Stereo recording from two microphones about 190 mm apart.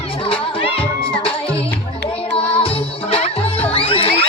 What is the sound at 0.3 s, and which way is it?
Music, 30° left (ahead or behind).